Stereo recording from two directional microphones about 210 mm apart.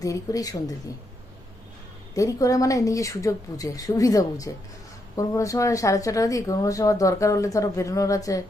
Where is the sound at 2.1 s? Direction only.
15° left (ahead or behind).